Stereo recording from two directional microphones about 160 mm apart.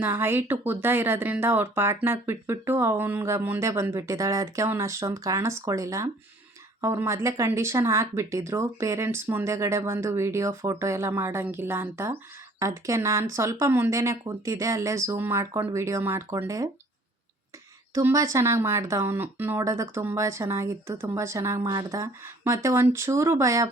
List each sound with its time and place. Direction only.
0.0 s speech: 15° right (ahead or behind)
17.9 s speech: 20° right (ahead or behind)